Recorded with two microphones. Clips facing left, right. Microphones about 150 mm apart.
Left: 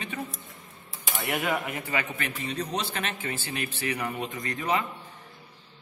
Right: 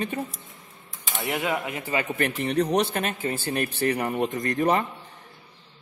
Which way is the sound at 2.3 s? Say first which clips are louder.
Right 9 dB; 65° right (ahead or behind).